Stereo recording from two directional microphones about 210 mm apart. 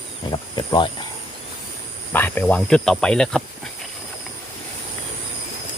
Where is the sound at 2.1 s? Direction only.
10° left (ahead or behind).